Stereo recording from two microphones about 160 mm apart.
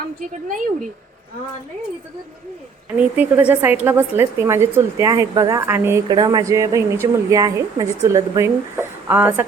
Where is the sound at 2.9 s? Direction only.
10° right (ahead or behind).